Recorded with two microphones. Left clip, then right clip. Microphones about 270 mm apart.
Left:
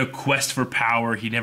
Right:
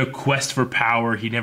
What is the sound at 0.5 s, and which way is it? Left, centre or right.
Speech, right.